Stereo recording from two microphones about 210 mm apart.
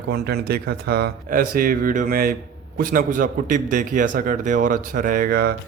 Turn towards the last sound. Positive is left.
turn(degrees=-45)  # may be behind; listen again after turning